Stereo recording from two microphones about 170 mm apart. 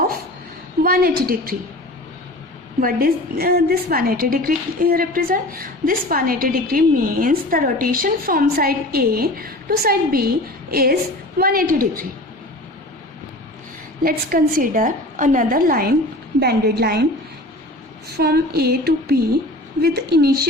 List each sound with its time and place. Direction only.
0.8 s a woman's voice: 60° right (ahead or behind)
2.8 s a woman's voice: 60° right (ahead or behind)
14.0 s a woman's voice: 60° right (ahead or behind)
18.1 s speech: 70° right (ahead or behind)